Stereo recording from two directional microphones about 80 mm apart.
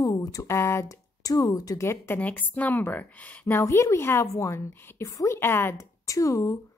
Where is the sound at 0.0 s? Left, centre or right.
Left.